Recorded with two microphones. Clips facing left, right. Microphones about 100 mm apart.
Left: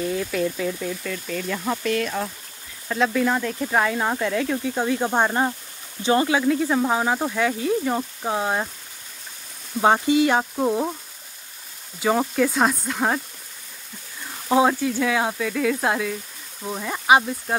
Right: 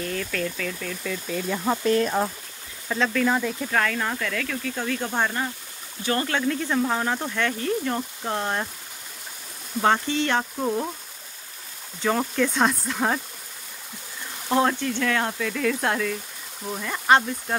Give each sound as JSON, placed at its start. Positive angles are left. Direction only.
{"t": 0.0, "sound": "speech", "side_deg": 10}
{"t": 1.0, "sound": "speech", "side_deg": -5}
{"t": 1.8, "sound": "speech", "side_deg": -30}
{"t": 2.9, "sound": "speech", "side_deg": 0}
{"t": 3.7, "sound": "speech", "side_deg": 20}
{"t": 6.2, "sound": "speech", "side_deg": 10}
{"t": 9.8, "sound": "speech", "side_deg": 15}
{"t": 12.0, "sound": "speech", "side_deg": 10}
{"t": 14.5, "sound": "speech", "side_deg": 10}